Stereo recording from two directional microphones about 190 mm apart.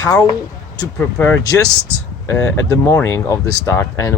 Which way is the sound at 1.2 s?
10° left (ahead or behind).